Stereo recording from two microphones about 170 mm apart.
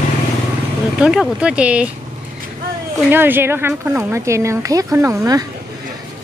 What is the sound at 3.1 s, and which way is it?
Speech, 10° right (ahead or behind).